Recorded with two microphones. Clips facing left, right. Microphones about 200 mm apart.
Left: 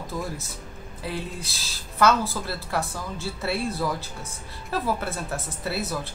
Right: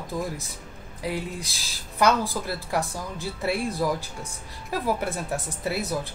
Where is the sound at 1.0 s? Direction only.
15° right (ahead or behind).